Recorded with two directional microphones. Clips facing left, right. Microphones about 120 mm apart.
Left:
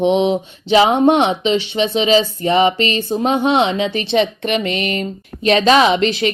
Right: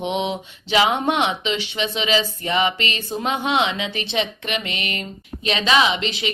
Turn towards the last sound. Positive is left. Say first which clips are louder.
# left 8 dB
turn(degrees=45)  # may be behind; listen again after turning